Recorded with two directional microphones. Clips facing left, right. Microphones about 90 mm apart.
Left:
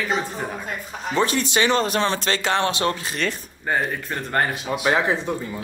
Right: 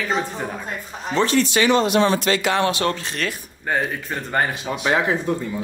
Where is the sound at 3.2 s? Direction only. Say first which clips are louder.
Left 1 dB; centre (ahead or behind).